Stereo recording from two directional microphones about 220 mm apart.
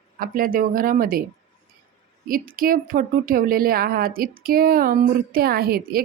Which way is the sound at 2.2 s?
40° right (ahead or behind).